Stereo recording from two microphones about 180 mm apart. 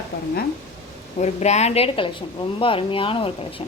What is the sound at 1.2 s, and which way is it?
A woman's voice, 40° left (ahead or behind).